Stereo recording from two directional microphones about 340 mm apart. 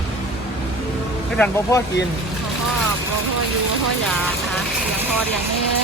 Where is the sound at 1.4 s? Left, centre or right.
Centre.